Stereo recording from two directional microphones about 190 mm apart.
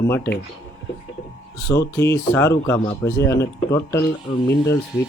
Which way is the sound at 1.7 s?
15° left (ahead or behind).